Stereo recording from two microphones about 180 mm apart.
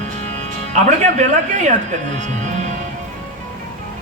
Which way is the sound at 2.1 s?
40° right (ahead or behind).